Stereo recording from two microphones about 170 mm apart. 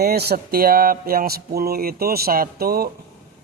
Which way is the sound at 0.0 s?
70° right (ahead or behind).